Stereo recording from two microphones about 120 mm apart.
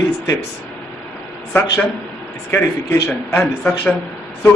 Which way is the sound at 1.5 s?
15° left (ahead or behind).